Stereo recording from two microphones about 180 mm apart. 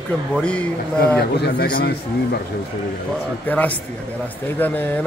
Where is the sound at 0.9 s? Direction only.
60° left (ahead or behind).